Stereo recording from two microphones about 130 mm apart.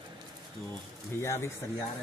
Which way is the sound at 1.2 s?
20° left (ahead or behind).